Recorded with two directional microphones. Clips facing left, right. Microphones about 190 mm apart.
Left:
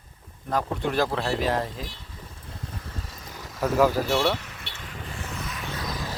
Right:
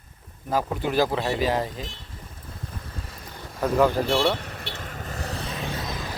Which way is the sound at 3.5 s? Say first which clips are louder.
Right 1 dB; 5° left (ahead or behind).